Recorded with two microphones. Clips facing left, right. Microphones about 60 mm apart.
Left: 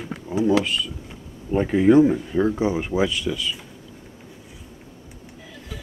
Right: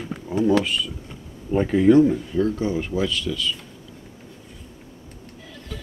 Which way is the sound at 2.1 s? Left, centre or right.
Left.